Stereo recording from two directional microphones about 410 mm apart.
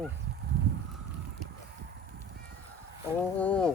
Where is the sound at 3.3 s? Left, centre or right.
Centre.